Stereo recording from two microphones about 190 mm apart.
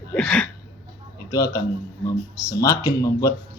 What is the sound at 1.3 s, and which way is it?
A man's voice, 20° left (ahead or behind).